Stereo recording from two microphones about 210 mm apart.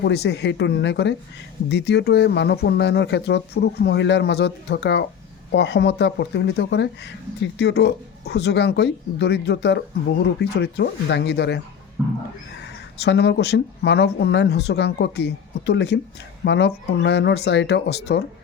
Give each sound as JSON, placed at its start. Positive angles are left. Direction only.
{"t": 0.0, "sound": "speech", "side_deg": 50}